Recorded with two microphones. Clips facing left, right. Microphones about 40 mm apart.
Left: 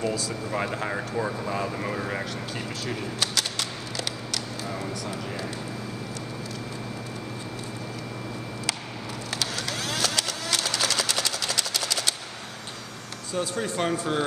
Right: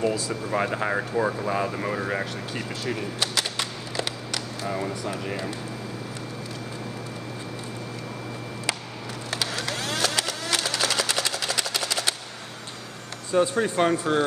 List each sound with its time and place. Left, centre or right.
0.0 s speech: centre
9.3 s a sound: centre
13.3 s speech: centre